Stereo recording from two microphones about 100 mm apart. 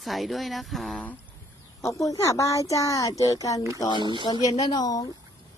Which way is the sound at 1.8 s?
30° left (ahead or behind).